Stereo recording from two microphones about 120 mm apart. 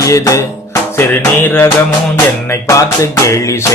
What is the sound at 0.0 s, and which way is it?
Music, 25° left (ahead or behind).